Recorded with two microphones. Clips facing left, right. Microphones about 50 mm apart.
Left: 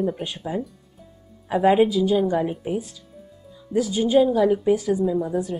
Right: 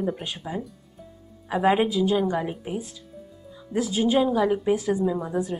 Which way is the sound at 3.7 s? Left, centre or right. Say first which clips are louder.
Left 2 dB; centre.